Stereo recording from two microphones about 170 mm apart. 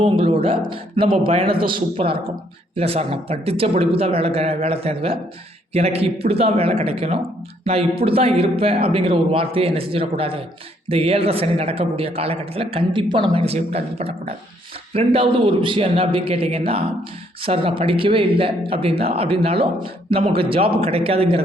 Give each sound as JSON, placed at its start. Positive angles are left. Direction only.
{"t": 0.0, "sound": "a man's voice", "side_deg": -30}